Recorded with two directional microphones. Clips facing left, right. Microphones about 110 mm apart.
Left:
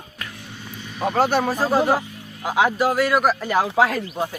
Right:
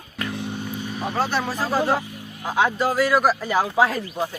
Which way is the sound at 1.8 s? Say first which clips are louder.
Left 2 dB; 15° left (ahead or behind).